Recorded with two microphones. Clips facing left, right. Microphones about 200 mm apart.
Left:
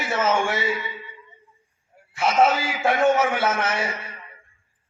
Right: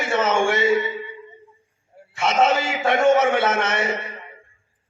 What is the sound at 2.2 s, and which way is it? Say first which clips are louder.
A man's voice: even; 25° right (ahead or behind).